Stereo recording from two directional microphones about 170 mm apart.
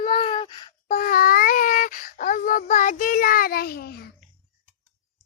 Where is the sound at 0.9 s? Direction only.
50° left (ahead or behind).